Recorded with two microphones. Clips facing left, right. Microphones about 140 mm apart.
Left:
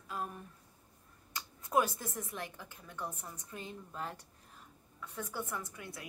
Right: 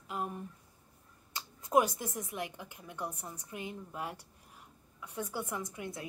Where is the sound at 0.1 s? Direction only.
20° right (ahead or behind).